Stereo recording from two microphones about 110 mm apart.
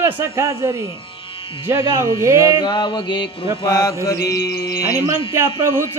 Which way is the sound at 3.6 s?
35° left (ahead or behind).